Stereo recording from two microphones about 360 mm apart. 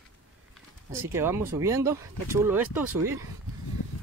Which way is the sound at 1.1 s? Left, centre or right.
Centre.